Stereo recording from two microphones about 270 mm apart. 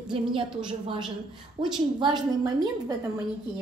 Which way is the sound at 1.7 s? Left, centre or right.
Centre.